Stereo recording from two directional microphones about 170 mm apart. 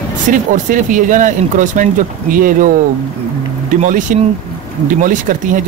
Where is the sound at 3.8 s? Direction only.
50° right (ahead or behind).